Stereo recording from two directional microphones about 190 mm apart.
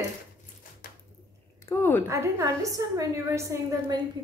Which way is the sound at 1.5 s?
15° left (ahead or behind).